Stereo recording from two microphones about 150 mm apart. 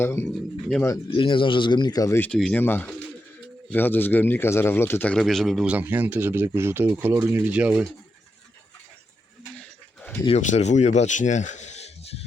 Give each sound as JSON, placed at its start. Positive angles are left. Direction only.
{"t": 0.0, "sound": "a man's voice", "side_deg": 15}
{"t": 1.1, "sound": "a man's voice", "side_deg": 35}
{"t": 5.7, "sound": "speech", "side_deg": -10}
{"t": 9.6, "sound": "a sound", "side_deg": 15}
{"t": 10.2, "sound": "speech", "side_deg": 50}